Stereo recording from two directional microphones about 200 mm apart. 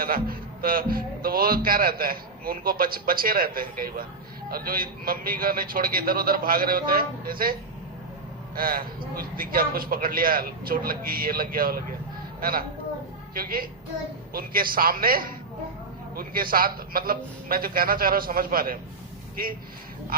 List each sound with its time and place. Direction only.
0.0 s a man's voice: 45° right (ahead or behind)
8.5 s a man's voice: 45° right (ahead or behind)